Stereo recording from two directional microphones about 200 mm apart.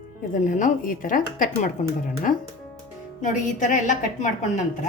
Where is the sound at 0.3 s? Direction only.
40° left (ahead or behind).